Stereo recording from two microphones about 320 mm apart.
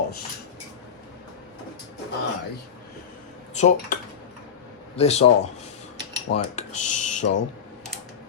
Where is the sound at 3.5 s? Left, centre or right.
Left.